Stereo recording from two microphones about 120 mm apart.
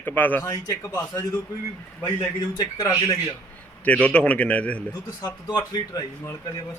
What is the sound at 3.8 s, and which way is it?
Speech, 10° left (ahead or behind).